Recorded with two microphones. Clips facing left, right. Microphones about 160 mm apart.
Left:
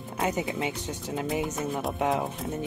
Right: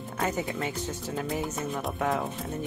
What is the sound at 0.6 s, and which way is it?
Speech, 15° left (ahead or behind).